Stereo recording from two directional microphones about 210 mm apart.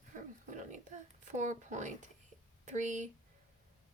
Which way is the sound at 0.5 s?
35° right (ahead or behind).